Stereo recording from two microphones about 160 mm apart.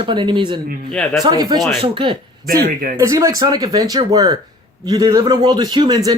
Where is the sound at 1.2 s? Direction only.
25° right (ahead or behind).